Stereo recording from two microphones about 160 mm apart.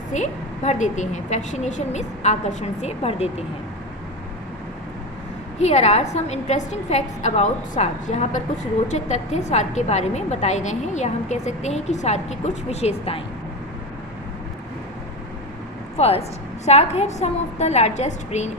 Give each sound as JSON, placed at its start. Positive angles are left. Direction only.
{"t": 0.1, "sound": "a woman's voice", "side_deg": 45}
{"t": 5.5, "sound": "a woman's voice", "side_deg": 45}
{"t": 16.0, "sound": "a woman's voice", "side_deg": 40}